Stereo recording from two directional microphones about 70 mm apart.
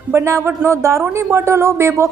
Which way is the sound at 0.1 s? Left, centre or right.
Right.